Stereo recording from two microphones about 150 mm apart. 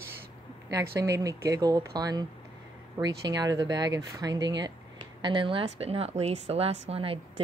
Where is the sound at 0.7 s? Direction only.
20° right (ahead or behind).